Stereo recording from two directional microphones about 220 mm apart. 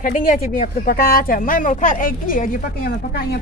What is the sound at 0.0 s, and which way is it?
Speech, 40° left (ahead or behind).